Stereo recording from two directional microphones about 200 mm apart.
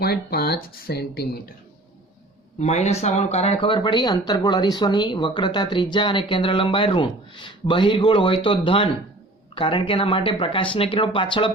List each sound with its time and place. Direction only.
0.0 s speech: 50° left (ahead or behind)
2.6 s speech: 35° left (ahead or behind)